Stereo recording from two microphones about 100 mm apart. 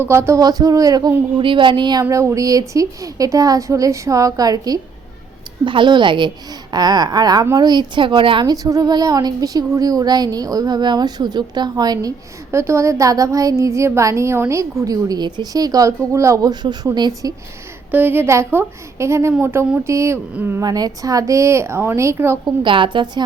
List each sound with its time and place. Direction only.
0.0 s a woman's voice: 25° right (ahead or behind)
0.4 s a woman's voice: 35° right (ahead or behind)
1.4 s a woman's voice: 55° right (ahead or behind)
2.0 s a woman's voice: 30° right (ahead or behind)
5.6 s a woman's voice: 55° right (ahead or behind)
8.4 s a woman's voice: 35° right (ahead or behind)
12.5 s a woman's voice: 30° right (ahead or behind)
17.9 s a woman's voice: 20° right (ahead or behind)
20.6 s a woman's voice: 40° right (ahead or behind)
22.6 s a woman's voice: 55° right (ahead or behind)